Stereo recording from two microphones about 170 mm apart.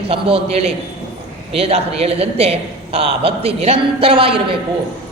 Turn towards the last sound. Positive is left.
turn(degrees=-30)  # may be behind; listen again after turning